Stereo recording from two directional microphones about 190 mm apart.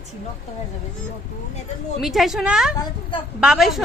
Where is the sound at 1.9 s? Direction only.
Centre (ahead or behind).